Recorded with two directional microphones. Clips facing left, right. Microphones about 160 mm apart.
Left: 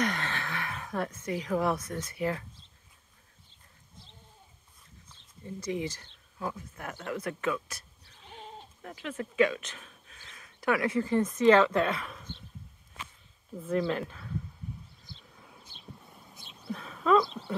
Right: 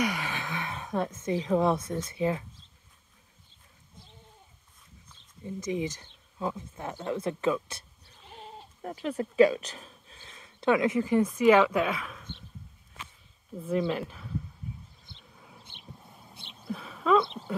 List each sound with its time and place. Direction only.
0.0 s a woman's voice: 10° right (ahead or behind)
5.4 s speech: 20° right (ahead or behind)
8.3 s goat: 5° right (ahead or behind)
8.8 s speech: 35° right (ahead or behind); by 12.3 s centre (ahead or behind)
13.7 s speech: 15° right (ahead or behind)
16.6 s a sound: centre (ahead or behind)